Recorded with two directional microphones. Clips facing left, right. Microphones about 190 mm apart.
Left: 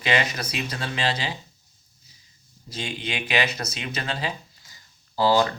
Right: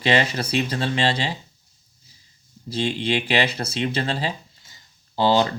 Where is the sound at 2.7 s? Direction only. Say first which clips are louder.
Right 8 dB; 30° right (ahead or behind).